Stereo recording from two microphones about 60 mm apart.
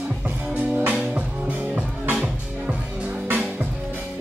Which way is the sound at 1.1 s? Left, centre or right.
Right.